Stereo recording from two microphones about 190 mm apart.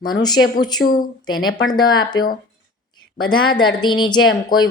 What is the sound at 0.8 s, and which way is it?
Speech, 50° left (ahead or behind).